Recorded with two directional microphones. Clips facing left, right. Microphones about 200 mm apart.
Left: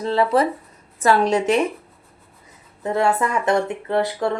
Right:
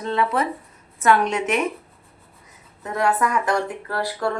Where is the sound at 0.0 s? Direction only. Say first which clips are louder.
Left 4 dB; 35° left (ahead or behind).